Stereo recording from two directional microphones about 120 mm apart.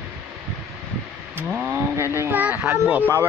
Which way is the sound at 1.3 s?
15° right (ahead or behind).